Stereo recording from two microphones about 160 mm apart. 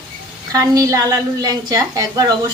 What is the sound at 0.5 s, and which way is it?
A woman's voice, 20° right (ahead or behind).